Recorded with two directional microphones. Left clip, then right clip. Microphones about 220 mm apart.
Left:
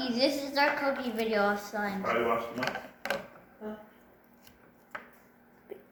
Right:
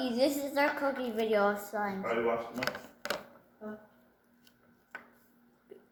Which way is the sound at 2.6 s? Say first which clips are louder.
Left 2 dB; 35° right (ahead or behind).